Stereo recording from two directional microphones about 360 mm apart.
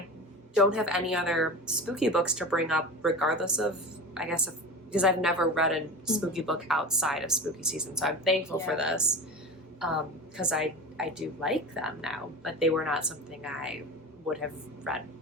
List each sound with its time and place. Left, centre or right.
0.5 s a woman's voice: centre
10.3 s a woman's voice: centre
14.9 s a woman's voice: centre